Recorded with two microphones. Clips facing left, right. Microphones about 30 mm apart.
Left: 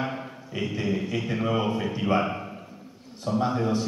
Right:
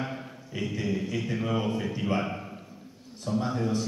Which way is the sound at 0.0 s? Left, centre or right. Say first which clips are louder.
Left 4 dB; left.